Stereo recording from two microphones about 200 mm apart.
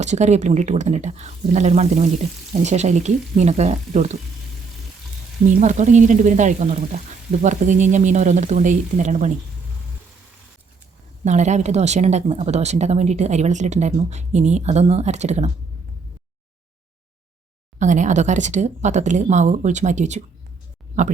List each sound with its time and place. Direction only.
0.0 s a woman's voice: 35° right (ahead or behind)
5.5 s a woman's voice: 40° right (ahead or behind)
11.3 s a woman's voice: 35° right (ahead or behind)
17.7 s a woman's voice: 40° right (ahead or behind)